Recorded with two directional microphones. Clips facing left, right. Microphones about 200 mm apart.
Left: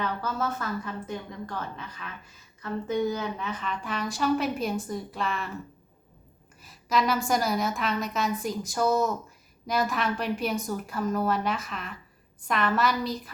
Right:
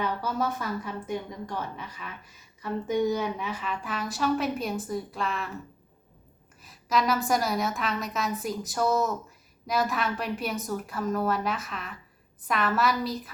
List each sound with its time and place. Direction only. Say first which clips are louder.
0.0 s a woman's voice: right 1 dB; 10° right (ahead or behind)
6.6 s a woman's voice: even; centre (ahead or behind)